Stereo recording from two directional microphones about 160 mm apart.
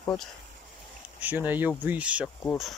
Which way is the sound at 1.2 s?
10° right (ahead or behind).